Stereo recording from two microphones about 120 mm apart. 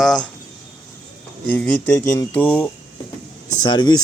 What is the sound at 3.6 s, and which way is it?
Speech, 40° left (ahead or behind).